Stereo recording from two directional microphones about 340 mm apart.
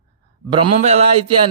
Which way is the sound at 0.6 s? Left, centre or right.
Centre.